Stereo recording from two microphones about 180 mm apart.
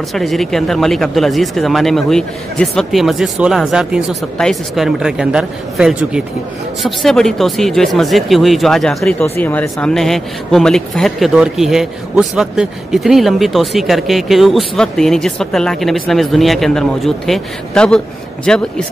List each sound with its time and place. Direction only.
0.1 s speech: centre (ahead or behind)